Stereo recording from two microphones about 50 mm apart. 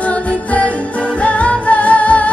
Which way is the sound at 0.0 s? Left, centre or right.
Left.